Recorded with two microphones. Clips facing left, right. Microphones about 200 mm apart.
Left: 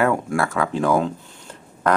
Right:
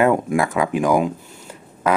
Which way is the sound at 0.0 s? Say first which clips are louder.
Right 3 dB; 20° right (ahead or behind).